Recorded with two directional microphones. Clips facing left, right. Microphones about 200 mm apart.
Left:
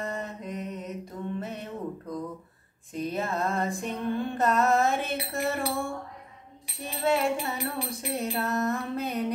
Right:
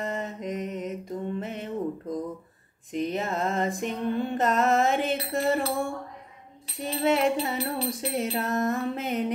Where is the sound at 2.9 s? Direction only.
20° right (ahead or behind).